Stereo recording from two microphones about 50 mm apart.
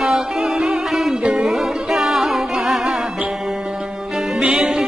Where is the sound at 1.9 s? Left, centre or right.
Centre.